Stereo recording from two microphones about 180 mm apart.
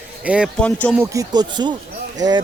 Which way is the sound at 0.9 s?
15° right (ahead or behind).